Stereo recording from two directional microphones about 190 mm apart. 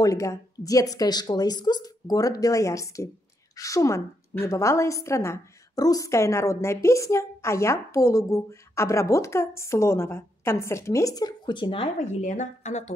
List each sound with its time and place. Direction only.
0.0 s a woman's voice: 15° left (ahead or behind); by 12.9 s 40° left (ahead or behind)